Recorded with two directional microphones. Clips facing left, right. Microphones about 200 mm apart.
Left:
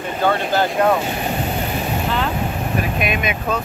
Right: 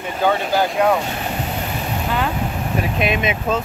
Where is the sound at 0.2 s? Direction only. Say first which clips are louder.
Even; 10° right (ahead or behind).